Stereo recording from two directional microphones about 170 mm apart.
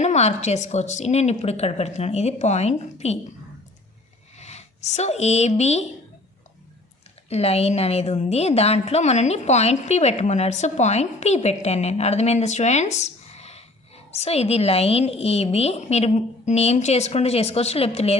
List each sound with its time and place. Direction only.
0.0 s a woman's voice: 40° left (ahead or behind)
4.4 s speech: 40° left (ahead or behind)
7.3 s a woman's voice: 35° left (ahead or behind)